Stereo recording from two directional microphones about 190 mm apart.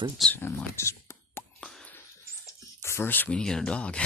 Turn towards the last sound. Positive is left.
turn(degrees=5)  # may be behind; listen again after turning